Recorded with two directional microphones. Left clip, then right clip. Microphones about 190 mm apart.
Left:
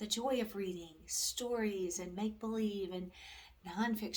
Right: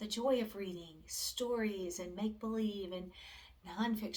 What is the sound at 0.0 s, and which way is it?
Speech, 25° left (ahead or behind).